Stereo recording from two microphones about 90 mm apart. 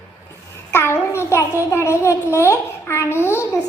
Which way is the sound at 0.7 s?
30° left (ahead or behind).